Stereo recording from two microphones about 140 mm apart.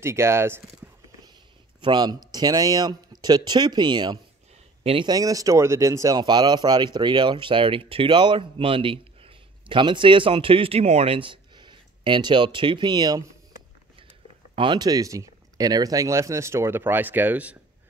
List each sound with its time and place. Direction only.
0.0 s speech: 20° right (ahead or behind)
1.8 s speech: 30° right (ahead or behind)
5.1 s speech: 25° right (ahead or behind)
14.5 s speech: 35° right (ahead or behind); by 17.6 s 10° right (ahead or behind)